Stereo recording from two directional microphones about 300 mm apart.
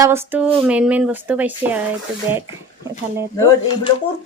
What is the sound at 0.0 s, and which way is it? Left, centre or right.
Speech, centre.